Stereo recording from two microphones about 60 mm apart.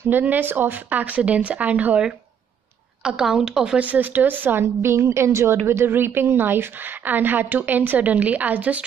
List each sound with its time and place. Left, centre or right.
0.1 s speech: right
3.0 s speech: centre
3.8 s a woman's voice: right
4.8 s a woman's voice: right